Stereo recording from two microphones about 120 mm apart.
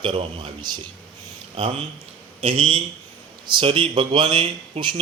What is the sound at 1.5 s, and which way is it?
Speech, 55° right (ahead or behind).